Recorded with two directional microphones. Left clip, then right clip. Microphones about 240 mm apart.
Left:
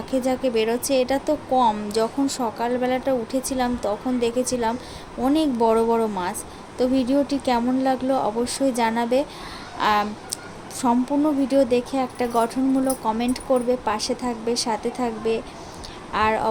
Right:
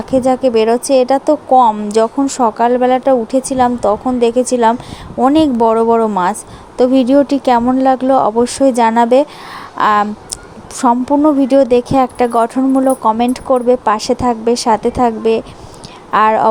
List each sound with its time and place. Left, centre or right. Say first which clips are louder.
0.1 s speech: right 11 dB; right